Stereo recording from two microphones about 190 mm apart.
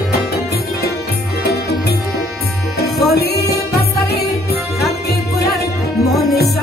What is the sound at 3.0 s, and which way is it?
Music, 55° left (ahead or behind).